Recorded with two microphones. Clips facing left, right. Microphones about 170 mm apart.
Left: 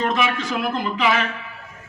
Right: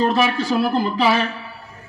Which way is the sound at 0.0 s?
35° right (ahead or behind).